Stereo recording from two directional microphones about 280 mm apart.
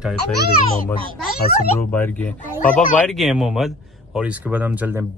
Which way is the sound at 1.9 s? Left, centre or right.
Centre.